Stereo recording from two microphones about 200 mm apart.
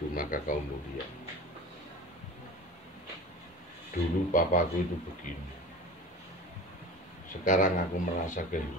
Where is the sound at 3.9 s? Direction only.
40° left (ahead or behind).